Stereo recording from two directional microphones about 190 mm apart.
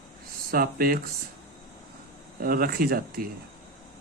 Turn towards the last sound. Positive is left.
turn(degrees=-50)  # may be behind; listen again after turning